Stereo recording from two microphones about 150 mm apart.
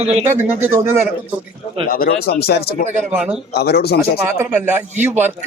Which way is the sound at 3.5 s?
90° left.